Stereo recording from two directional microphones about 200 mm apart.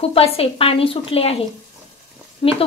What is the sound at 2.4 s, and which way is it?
Speech, 30° left (ahead or behind).